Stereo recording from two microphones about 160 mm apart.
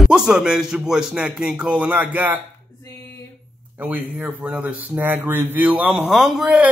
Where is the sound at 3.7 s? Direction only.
10° right (ahead or behind).